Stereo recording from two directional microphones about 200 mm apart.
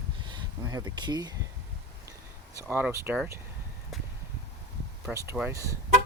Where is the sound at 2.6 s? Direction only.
10° right (ahead or behind).